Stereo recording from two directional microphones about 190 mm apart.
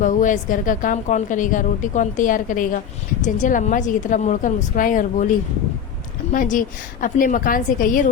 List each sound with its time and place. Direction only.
0.0 s a woman's voice: 40° left (ahead or behind)
6.3 s a woman's voice: 45° left (ahead or behind)